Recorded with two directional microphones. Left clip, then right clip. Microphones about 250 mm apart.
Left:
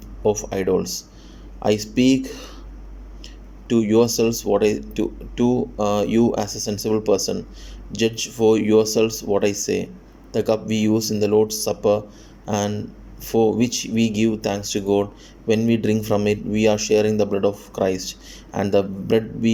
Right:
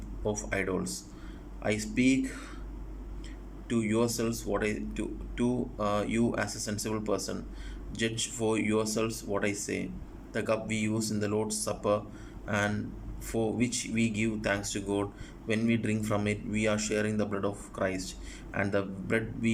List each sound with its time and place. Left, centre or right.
0.3 s speech: centre
3.7 s speech: centre